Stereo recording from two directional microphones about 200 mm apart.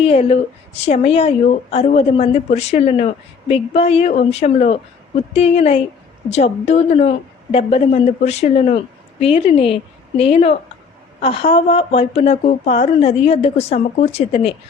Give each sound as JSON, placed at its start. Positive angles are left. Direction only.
{"t": 0.0, "sound": "a woman's voice", "side_deg": 30}